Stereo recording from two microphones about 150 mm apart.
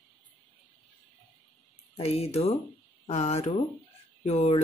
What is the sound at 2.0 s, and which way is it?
Speech, 40° left (ahead or behind).